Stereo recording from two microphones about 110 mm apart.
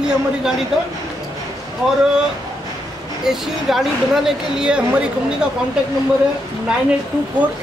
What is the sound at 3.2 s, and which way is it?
Speech, 5° right (ahead or behind).